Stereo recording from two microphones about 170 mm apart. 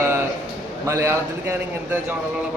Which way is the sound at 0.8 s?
15° right (ahead or behind).